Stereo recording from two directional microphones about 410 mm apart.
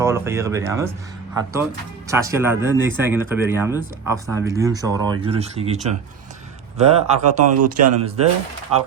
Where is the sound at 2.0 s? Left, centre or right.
Centre.